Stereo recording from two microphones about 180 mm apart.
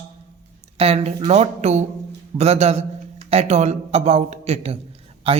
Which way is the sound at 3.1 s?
35° right (ahead or behind).